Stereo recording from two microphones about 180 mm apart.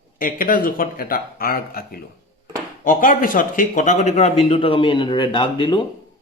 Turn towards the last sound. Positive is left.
turn(degrees=25)  # may be behind; listen again after turning